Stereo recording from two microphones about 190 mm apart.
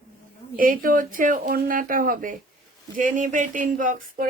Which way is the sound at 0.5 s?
45° right (ahead or behind).